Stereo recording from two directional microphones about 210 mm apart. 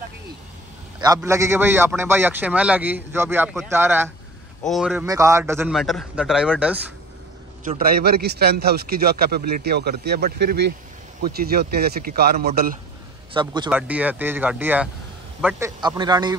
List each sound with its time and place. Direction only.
1.0 s a man's voice: 15° right (ahead or behind)
5.0 s a man's voice: 15° right (ahead or behind)
7.6 s a man's voice: 40° right (ahead or behind)
13.3 s speech: 20° right (ahead or behind)
13.7 s a man's voice: 5° right (ahead or behind)
15.8 s speech: 20° right (ahead or behind)